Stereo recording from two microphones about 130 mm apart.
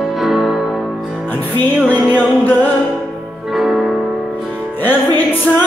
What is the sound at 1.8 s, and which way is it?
Music, 10° left (ahead or behind).